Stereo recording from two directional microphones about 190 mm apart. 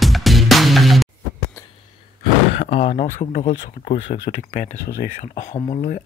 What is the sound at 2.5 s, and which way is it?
Speech, 35° left (ahead or behind).